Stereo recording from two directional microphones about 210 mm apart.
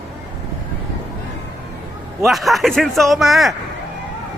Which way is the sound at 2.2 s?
Centre (ahead or behind).